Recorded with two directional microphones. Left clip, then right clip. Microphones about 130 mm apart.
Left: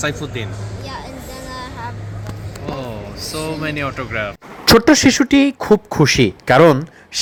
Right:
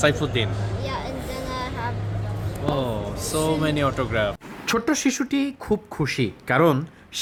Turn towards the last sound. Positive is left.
turn(degrees=25)  # may be behind; listen again after turning